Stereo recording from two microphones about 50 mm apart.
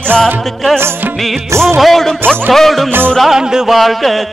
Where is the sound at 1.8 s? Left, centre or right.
Centre.